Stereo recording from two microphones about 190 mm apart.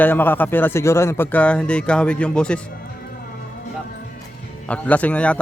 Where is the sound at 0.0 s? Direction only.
10° left (ahead or behind).